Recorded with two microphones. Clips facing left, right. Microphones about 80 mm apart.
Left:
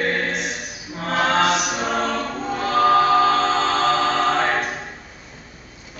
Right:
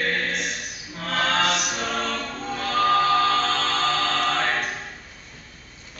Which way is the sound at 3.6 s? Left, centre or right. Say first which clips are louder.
Left 5 dB; left.